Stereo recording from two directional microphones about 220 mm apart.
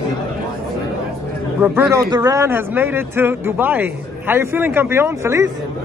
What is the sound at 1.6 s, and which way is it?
Speech, 10° right (ahead or behind).